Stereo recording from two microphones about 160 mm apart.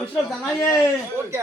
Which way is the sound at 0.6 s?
20° left (ahead or behind).